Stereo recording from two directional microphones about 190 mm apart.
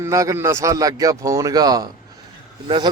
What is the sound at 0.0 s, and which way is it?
Speech, 15° right (ahead or behind).